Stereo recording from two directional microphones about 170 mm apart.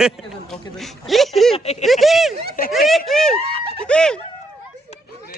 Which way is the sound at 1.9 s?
Centre (ahead or behind).